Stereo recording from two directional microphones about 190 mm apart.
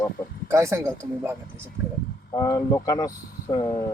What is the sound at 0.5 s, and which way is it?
Speech, 15° right (ahead or behind).